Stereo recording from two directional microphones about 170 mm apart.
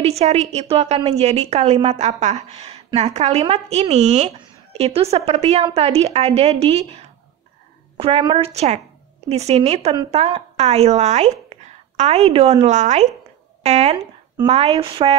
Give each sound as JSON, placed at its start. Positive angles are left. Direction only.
{"t": 0.0, "sound": "a woman's voice", "side_deg": -40}